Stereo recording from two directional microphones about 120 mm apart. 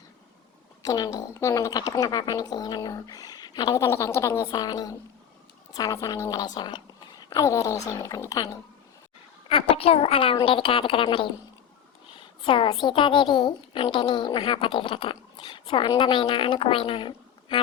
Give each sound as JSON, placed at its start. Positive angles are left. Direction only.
{"t": 0.8, "sound": "a woman's voice", "side_deg": 30}
{"t": 3.8, "sound": "a woman's voice", "side_deg": 20}
{"t": 7.3, "sound": "a woman's voice", "side_deg": 25}
{"t": 9.5, "sound": "a woman's voice", "side_deg": 50}